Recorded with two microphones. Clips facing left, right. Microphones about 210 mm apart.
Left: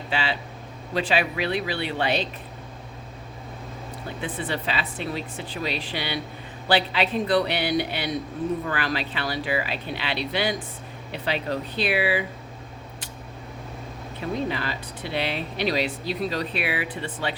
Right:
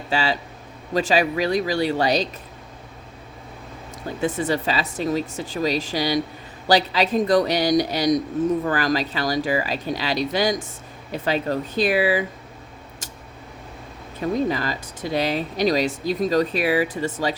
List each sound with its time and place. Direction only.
0.1 s speech: 40° right (ahead or behind)
4.2 s speech: 40° right (ahead or behind)
14.3 s speech: 40° right (ahead or behind)